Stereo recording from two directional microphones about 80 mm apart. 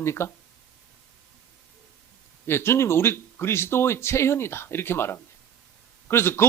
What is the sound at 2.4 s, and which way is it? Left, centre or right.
Speech, left.